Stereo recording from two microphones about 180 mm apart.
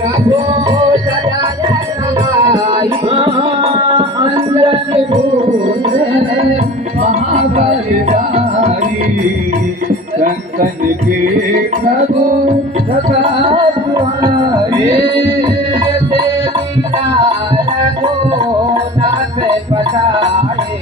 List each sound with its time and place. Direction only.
0.3 s music: 25° right (ahead or behind)
2.4 s music: 25° right (ahead or behind)
6.5 s music: 40° right (ahead or behind)
11.5 s music: 50° right (ahead or behind)
13.9 s music: 20° right (ahead or behind)
18.5 s music: 20° right (ahead or behind)